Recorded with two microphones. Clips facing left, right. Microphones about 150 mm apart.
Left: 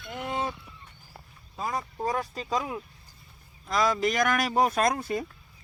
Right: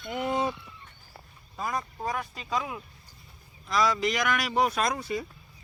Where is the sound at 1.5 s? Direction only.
25° left (ahead or behind).